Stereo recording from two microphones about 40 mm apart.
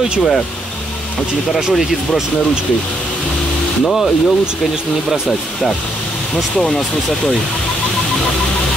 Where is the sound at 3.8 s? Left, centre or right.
Centre.